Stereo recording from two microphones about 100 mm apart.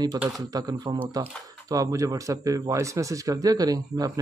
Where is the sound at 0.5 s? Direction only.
35° right (ahead or behind).